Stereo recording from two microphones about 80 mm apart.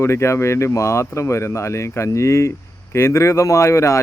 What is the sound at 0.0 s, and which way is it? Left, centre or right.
Speech, left.